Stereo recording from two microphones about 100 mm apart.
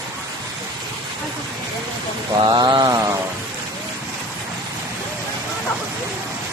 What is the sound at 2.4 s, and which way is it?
Mantra, 50° right (ahead or behind).